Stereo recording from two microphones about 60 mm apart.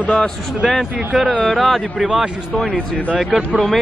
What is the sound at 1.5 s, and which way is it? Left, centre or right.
Speech, centre.